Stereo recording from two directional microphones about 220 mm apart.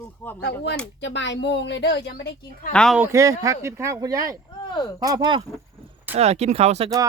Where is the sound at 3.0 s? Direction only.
15° right (ahead or behind).